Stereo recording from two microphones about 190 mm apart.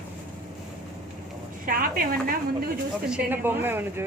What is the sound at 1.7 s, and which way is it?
A woman's voice, 50° right (ahead or behind).